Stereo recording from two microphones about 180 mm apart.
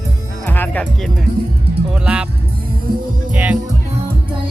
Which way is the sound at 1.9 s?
5° right (ahead or behind).